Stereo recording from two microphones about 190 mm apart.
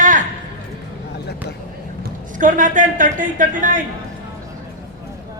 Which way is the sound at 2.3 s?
45° right (ahead or behind).